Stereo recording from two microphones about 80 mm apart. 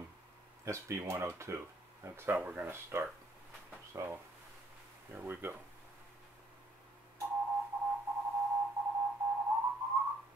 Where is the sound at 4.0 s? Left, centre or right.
Right.